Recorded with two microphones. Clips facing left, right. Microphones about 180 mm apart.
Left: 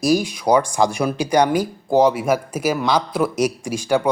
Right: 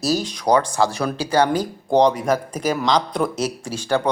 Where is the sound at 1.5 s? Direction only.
5° left (ahead or behind).